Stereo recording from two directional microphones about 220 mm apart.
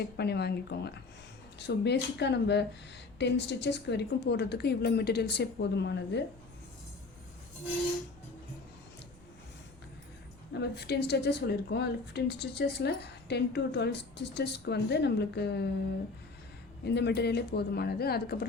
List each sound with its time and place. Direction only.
0.0 s a woman's voice: 50° left (ahead or behind)
10.5 s a woman's voice: 50° left (ahead or behind)
16.8 s a woman's voice: 50° left (ahead or behind)